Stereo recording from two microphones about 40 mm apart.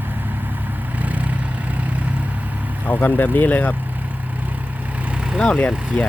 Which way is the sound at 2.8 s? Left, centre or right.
Left.